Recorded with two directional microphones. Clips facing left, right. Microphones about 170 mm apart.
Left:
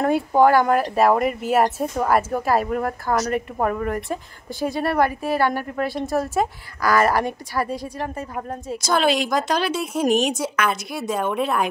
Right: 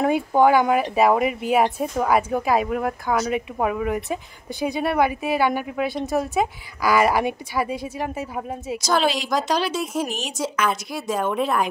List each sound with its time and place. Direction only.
0.0 s speech: centre (ahead or behind)
9.5 s a woman's voice: 55° left (ahead or behind)
10.7 s speech: 5° left (ahead or behind)